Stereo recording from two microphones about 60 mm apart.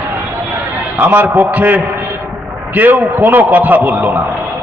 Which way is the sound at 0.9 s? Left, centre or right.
Right.